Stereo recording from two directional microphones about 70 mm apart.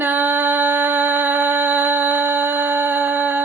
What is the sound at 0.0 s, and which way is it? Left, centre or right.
Music, right.